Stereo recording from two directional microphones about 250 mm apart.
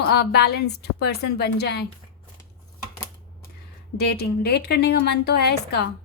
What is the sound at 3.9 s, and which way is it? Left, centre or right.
A woman's voice, left.